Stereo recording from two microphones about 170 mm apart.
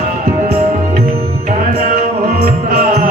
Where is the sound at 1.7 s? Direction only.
60° right (ahead or behind).